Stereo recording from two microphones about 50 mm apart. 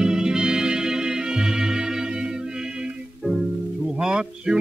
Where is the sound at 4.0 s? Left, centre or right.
Centre.